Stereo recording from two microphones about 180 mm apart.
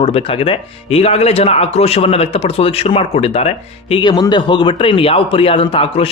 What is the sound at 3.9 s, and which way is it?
A man's voice, 25° left (ahead or behind).